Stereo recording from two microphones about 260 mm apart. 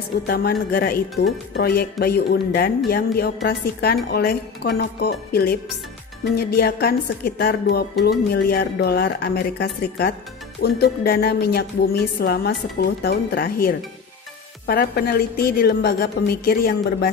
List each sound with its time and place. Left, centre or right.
0.3 s speech: left